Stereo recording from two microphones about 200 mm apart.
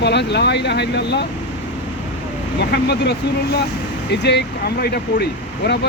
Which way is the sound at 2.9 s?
55° left (ahead or behind).